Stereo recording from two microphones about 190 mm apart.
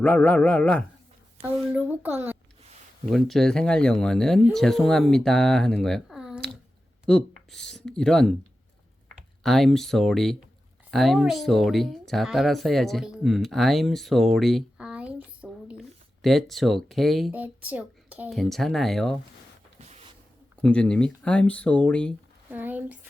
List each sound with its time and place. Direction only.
0.0 s speech: 5° left (ahead or behind)
1.4 s a child's voice: 10° right (ahead or behind)
3.1 s speech: centre (ahead or behind)
9.4 s speech: centre (ahead or behind)
19.8 s a sound: 35° right (ahead or behind)
20.6 s speech: 5° left (ahead or behind)
22.4 s a sound: 10° right (ahead or behind)